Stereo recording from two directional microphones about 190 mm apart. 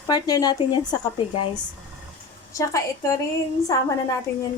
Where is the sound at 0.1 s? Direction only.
20° left (ahead or behind).